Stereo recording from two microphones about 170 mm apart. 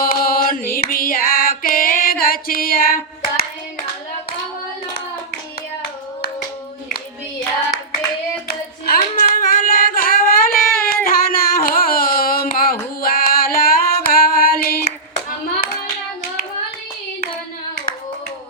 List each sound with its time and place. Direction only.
0.0 s mantra: 60° left (ahead or behind)
0.7 s music: 55° left (ahead or behind)
8.4 s singing: 60° left (ahead or behind)